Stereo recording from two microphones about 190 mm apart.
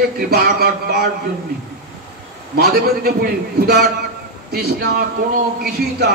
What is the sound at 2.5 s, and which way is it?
A man's voice, 55° right (ahead or behind).